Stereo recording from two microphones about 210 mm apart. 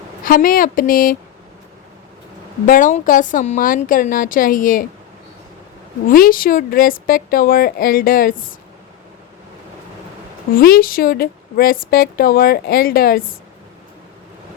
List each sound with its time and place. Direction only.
0.3 s a woman's voice: 40° left (ahead or behind)
2.6 s a woman's voice: 40° left (ahead or behind)
6.1 s a woman's voice: 45° left (ahead or behind)
10.5 s a woman's voice: 45° left (ahead or behind)